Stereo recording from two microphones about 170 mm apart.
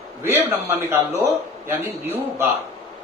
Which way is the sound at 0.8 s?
15° right (ahead or behind).